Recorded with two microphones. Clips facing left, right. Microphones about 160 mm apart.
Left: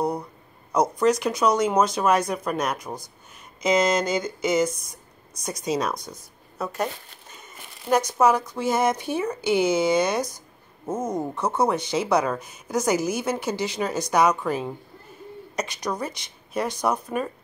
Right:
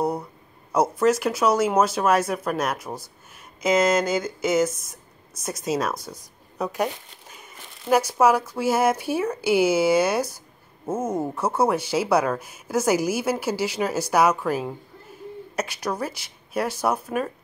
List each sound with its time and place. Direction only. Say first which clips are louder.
0.0 s speech: right 1 dB; 5° right (ahead or behind)